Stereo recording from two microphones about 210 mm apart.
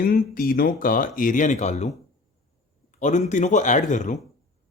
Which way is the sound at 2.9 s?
35° left (ahead or behind).